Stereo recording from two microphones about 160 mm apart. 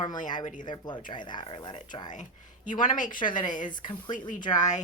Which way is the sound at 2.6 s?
55° left (ahead or behind).